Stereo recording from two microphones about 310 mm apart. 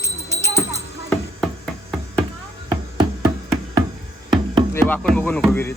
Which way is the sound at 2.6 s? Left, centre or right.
Centre.